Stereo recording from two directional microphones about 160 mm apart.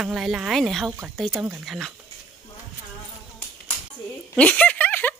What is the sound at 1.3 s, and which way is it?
Speech, 15° right (ahead or behind).